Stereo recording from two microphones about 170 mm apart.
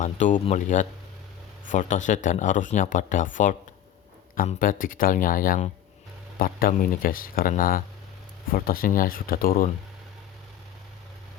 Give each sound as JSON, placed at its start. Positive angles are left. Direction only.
{"t": 0.0, "sound": "speech", "side_deg": 45}